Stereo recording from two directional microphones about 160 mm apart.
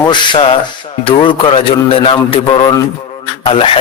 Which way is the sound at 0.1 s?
30° left (ahead or behind).